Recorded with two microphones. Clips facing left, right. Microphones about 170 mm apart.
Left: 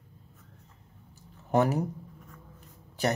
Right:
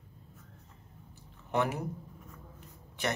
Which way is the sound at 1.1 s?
40° left (ahead or behind).